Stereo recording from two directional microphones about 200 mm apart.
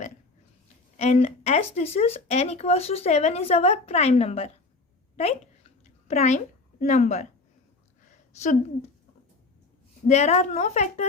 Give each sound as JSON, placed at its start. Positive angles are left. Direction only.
{"t": 0.9, "sound": "speech", "side_deg": 30}
{"t": 5.1, "sound": "a sound", "side_deg": 30}
{"t": 10.1, "sound": "speech", "side_deg": 35}